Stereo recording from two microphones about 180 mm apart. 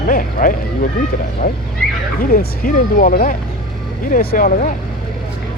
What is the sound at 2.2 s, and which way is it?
Speech, 50° left (ahead or behind).